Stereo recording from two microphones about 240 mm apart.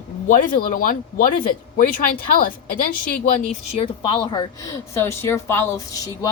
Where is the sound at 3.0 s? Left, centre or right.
Left.